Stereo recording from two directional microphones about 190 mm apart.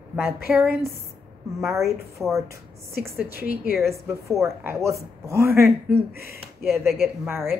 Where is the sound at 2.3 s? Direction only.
15° right (ahead or behind).